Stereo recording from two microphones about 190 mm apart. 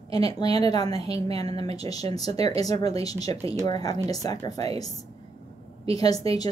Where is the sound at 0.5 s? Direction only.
30° right (ahead or behind).